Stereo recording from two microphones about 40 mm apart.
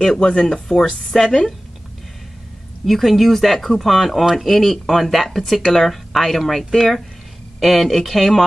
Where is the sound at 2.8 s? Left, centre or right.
Centre.